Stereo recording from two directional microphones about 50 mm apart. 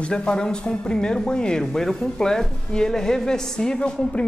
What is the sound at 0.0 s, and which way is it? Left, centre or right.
Speech, centre.